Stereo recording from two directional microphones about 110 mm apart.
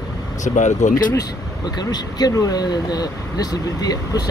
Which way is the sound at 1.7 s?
35° left (ahead or behind).